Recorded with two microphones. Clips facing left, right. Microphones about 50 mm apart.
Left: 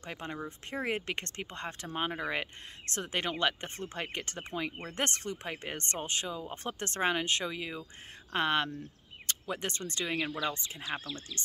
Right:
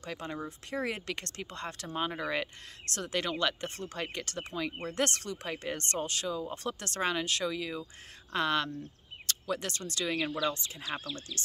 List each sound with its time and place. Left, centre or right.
0.0 s speech: left